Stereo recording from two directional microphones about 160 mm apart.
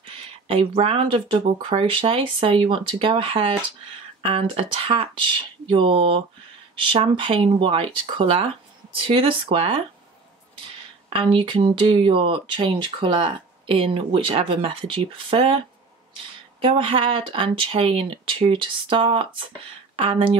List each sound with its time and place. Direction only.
0.1 s speech: 35° right (ahead or behind)
11.1 s speech: 30° right (ahead or behind)
16.6 s speech: 35° right (ahead or behind)